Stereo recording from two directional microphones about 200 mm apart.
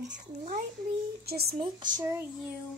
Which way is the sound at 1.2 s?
50° right (ahead or behind).